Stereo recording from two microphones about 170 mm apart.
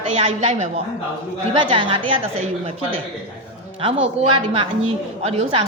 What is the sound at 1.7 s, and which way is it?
Speech, 30° right (ahead or behind).